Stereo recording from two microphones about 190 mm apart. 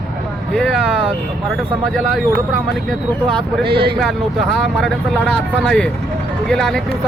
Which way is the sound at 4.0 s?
Centre (ahead or behind).